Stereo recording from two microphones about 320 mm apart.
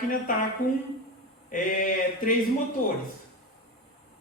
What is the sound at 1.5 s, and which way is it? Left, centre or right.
Speech, left.